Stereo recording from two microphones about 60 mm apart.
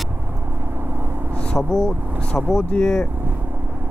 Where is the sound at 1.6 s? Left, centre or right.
Centre.